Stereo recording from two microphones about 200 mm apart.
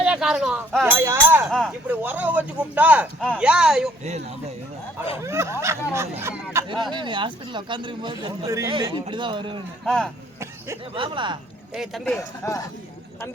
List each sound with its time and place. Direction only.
0.0 s speech: 5° right (ahead or behind)
0.9 s speech: 10° right (ahead or behind)
1.5 s speech: centre (ahead or behind)
5.2 s speech: 15° right (ahead or behind)
6.9 s speech: 25° right (ahead or behind)
9.8 s speech: 5° left (ahead or behind)
10.9 s speech: 25° right (ahead or behind)
11.7 s speech: centre (ahead or behind)
12.4 s speech: 15° left (ahead or behind)